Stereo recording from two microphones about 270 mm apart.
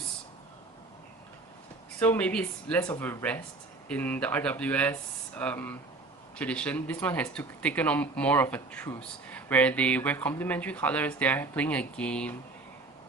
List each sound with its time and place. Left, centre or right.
2.0 s speech: centre